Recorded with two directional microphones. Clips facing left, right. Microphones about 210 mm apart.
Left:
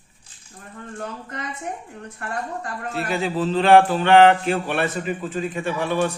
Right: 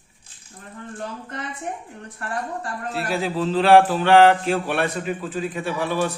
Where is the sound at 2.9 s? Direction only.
Centre (ahead or behind).